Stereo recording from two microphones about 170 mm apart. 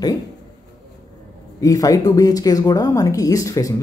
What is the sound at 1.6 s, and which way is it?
Speech, 20° left (ahead or behind).